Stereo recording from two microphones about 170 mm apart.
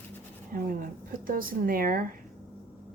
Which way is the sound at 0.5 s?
55° right (ahead or behind).